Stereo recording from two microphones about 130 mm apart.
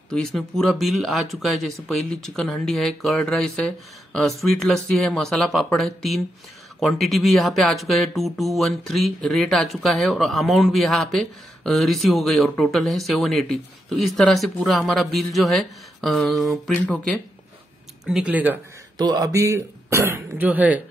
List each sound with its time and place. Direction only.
0.1 s speech: 5° left (ahead or behind)
18.0 s speech: 10° right (ahead or behind)
18.9 s speech: 30° right (ahead or behind); by 20.8 s 10° right (ahead or behind)